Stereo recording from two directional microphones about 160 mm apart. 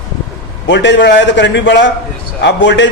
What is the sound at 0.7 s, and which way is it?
A man's voice, 90° left.